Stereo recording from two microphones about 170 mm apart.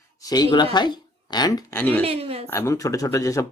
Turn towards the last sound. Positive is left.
turn(degrees=20)  # may be behind; listen again after turning